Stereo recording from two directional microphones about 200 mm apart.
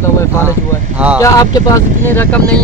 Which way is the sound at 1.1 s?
15° left (ahead or behind).